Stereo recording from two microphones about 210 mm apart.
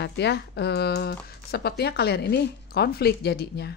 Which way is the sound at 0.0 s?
55° left (ahead or behind).